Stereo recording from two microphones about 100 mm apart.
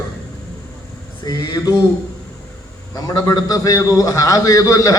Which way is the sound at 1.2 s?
45° left (ahead or behind).